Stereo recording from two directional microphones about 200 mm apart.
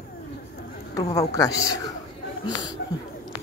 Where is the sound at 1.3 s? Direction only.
20° left (ahead or behind).